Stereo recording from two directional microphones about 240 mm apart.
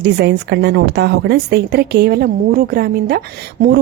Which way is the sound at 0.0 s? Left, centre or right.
Right.